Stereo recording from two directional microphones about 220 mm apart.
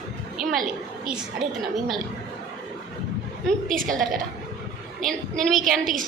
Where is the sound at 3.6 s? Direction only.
40° right (ahead or behind).